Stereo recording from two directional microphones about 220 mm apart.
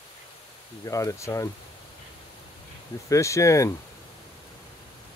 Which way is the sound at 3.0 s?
15° left (ahead or behind).